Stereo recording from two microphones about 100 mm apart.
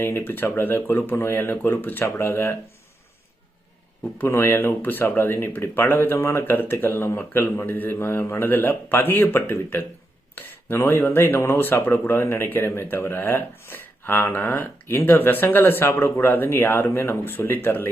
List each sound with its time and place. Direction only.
0.0 s speech: 25° left (ahead or behind)
4.2 s speech: 25° left (ahead or behind)